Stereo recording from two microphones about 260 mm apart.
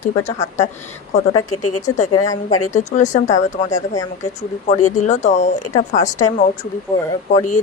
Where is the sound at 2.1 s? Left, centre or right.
Centre.